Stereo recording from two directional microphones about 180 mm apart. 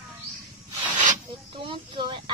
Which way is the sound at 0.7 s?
45° right (ahead or behind).